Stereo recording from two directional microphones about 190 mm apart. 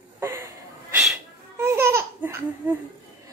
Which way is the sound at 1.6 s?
15° right (ahead or behind).